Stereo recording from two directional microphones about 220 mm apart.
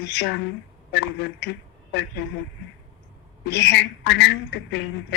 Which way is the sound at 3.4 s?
50° left (ahead or behind).